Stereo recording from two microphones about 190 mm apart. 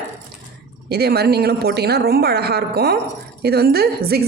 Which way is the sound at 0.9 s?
55° right (ahead or behind).